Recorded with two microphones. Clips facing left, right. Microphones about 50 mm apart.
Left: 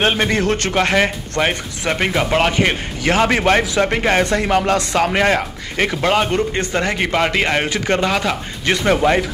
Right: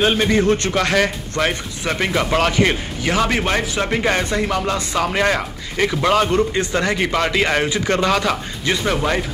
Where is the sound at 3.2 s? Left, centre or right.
Left.